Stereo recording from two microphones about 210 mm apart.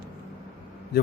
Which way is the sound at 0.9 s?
45° left (ahead or behind).